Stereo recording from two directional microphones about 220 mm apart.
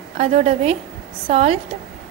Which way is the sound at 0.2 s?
30° right (ahead or behind).